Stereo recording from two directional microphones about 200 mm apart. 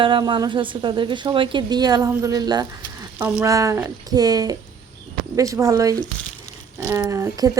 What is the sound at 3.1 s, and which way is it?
A woman's voice, 10° right (ahead or behind).